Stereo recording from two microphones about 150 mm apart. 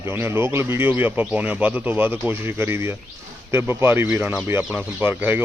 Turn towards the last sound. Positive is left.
turn(degrees=-10)  # may be behind; listen again after turning